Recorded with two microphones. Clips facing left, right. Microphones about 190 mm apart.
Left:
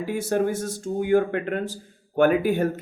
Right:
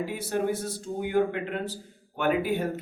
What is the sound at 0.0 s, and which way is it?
A man's voice, 45° left (ahead or behind).